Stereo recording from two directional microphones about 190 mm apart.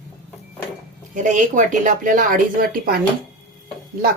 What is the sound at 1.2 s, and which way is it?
Speech, 40° right (ahead or behind).